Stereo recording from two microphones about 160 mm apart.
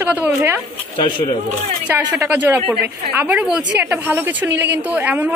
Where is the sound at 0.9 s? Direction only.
35° left (ahead or behind).